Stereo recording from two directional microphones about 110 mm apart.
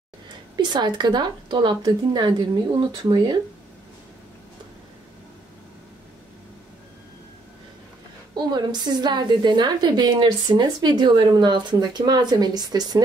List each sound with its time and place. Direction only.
0.6 s a woman's voice: 40° right (ahead or behind)
3.0 s speech: 45° right (ahead or behind)
8.4 s a woman's voice: 40° right (ahead or behind)